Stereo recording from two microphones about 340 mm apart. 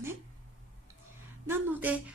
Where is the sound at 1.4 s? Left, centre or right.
Centre.